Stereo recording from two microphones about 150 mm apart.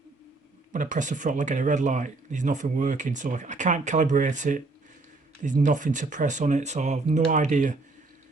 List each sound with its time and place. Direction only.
0.7 s speech: 55° right (ahead or behind)